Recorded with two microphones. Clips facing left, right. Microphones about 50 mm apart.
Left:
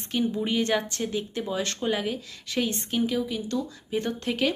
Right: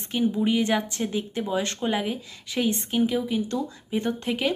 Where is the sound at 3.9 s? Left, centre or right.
Centre.